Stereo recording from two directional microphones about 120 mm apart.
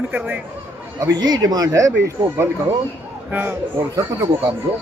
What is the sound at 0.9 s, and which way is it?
Speech, 35° right (ahead or behind).